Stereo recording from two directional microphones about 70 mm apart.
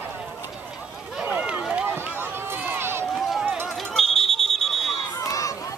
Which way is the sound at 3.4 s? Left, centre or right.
Right.